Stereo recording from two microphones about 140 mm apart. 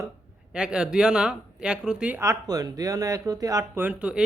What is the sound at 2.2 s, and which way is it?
Speech, 25° right (ahead or behind).